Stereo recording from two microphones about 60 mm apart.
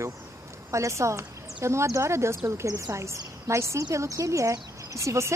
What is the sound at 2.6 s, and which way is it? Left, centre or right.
A woman's voice, right.